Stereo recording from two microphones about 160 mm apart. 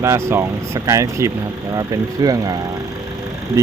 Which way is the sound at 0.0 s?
15° right (ahead or behind).